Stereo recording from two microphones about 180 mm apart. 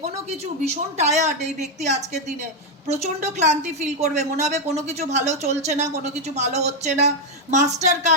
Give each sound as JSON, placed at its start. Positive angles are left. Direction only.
{"t": 0.7, "sound": "a woman's voice", "side_deg": -40}